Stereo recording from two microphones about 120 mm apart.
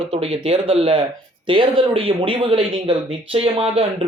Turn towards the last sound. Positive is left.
turn(degrees=-55)  # may be behind; listen again after turning